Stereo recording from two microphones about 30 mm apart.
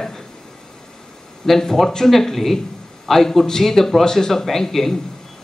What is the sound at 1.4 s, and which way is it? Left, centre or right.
A man's voice, centre.